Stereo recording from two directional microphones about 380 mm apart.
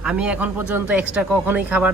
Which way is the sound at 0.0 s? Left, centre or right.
Centre.